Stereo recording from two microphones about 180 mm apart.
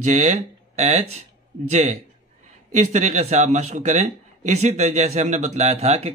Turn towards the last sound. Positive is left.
turn(degrees=-35)  # may be behind; listen again after turning